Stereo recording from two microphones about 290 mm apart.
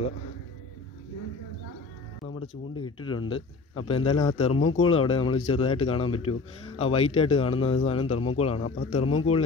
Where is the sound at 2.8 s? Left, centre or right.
Centre.